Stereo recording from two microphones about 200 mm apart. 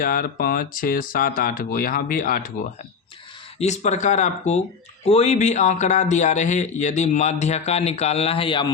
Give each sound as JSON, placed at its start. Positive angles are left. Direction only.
{"t": 0.0, "sound": "speech", "side_deg": 45}
{"t": 3.6, "sound": "a man's voice", "side_deg": 35}